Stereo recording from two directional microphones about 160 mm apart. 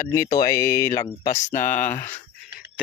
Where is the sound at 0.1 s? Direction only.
20° left (ahead or behind).